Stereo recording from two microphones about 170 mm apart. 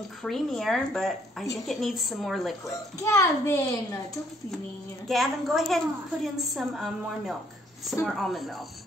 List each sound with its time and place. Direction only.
0.2 s a woman's voice: centre (ahead or behind)
3.0 s a child's voice: 15° left (ahead or behind)
5.0 s a woman's voice: centre (ahead or behind)